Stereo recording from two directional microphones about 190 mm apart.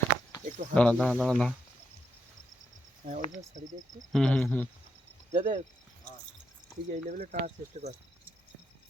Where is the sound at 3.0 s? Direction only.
45° right (ahead or behind).